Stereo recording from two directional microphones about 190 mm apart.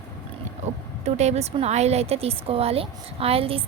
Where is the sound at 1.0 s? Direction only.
35° right (ahead or behind).